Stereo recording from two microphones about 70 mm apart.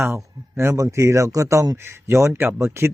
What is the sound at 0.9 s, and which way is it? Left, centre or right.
Speech, right.